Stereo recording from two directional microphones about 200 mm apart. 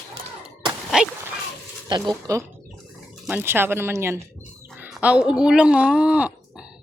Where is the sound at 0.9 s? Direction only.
Centre (ahead or behind).